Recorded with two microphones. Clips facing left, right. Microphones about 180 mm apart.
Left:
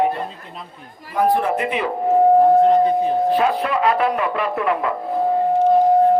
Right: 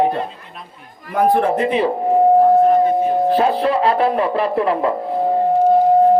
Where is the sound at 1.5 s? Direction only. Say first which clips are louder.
Right 4 dB; 30° right (ahead or behind).